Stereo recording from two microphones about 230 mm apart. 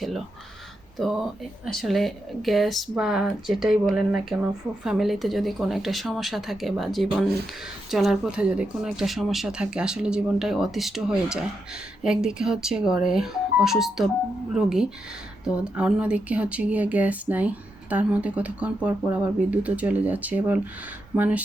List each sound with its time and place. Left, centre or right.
0.9 s speech: centre